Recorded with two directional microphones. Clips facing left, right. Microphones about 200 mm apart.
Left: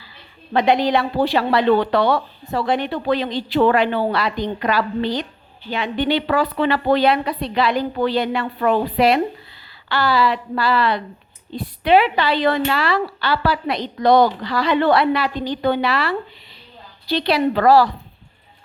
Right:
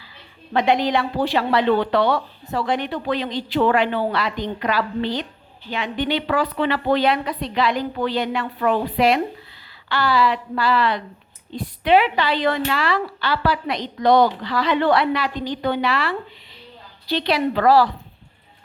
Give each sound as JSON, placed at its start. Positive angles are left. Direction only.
{"t": 0.5, "sound": "a woman's voice", "side_deg": 35}